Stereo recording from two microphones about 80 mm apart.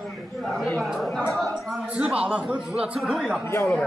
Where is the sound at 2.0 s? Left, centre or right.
Centre.